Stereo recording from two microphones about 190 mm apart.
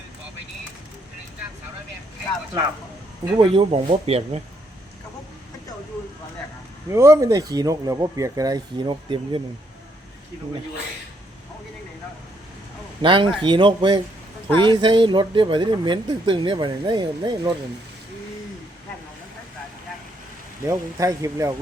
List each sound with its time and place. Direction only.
3.3 s speech: 25° right (ahead or behind)
6.9 s speech: 15° right (ahead or behind)
13.0 s speech: 25° right (ahead or behind)
20.7 s speech: 15° right (ahead or behind)